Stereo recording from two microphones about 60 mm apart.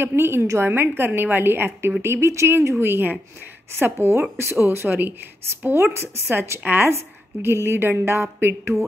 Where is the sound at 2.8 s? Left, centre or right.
Right.